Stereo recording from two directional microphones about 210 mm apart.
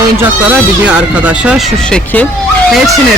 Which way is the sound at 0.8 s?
5° right (ahead or behind).